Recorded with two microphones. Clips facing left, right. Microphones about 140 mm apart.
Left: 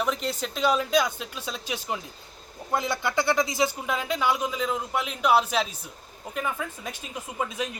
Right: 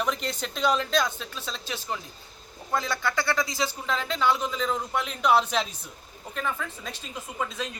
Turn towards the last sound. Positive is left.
turn(degrees=15)  # may be behind; listen again after turning